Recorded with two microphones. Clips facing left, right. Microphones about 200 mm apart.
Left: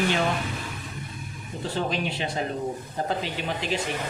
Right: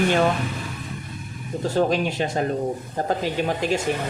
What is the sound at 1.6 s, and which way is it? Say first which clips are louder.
Speech: right 7 dB; 45° right (ahead or behind).